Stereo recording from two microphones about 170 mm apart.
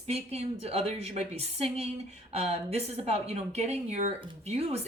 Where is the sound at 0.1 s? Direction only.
35° right (ahead or behind).